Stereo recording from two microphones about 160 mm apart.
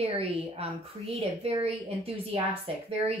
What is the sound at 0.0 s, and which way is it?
A woman's voice, 40° right (ahead or behind).